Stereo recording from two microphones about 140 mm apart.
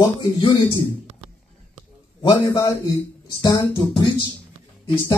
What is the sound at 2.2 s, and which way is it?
Speech, 30° left (ahead or behind).